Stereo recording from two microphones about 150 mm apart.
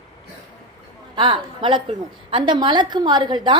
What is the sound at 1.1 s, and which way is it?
A woman's voice, 30° right (ahead or behind).